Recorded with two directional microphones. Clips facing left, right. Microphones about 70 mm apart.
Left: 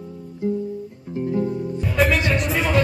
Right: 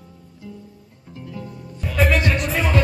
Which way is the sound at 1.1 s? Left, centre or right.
Left.